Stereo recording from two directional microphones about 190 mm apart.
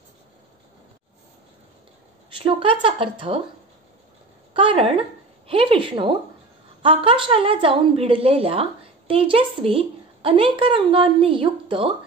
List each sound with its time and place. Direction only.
2.3 s speech: 30° right (ahead or behind)
4.6 s speech: 30° right (ahead or behind)